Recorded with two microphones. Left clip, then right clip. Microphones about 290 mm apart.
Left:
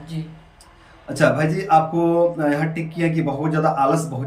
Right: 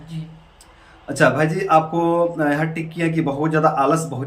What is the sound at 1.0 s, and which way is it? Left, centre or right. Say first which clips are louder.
Speech: right 1 dB; centre.